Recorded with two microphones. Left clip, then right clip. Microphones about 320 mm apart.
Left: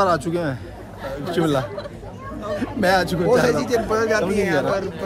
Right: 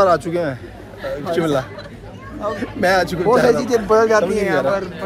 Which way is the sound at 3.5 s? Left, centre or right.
Centre.